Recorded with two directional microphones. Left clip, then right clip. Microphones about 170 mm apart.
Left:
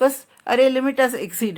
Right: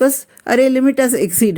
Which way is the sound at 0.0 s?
45° right (ahead or behind).